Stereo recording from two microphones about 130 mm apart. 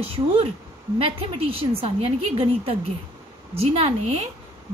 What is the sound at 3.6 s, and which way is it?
Speech, 50° right (ahead or behind).